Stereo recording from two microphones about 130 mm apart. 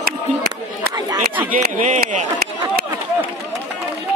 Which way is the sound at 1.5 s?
85° right.